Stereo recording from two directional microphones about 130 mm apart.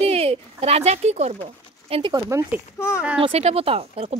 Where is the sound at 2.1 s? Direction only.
20° right (ahead or behind).